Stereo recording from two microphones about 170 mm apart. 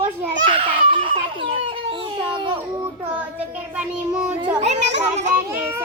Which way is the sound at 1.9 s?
30° right (ahead or behind).